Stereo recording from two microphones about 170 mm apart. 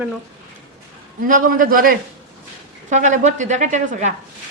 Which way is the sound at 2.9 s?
45° right (ahead or behind).